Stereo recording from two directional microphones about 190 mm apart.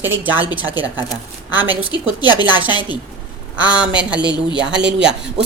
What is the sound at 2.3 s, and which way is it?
Speech, 20° left (ahead or behind).